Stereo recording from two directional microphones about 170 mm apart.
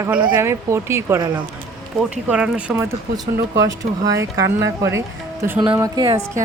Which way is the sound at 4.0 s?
20° right (ahead or behind).